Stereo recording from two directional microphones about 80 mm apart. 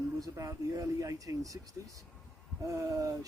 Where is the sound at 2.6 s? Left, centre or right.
Right.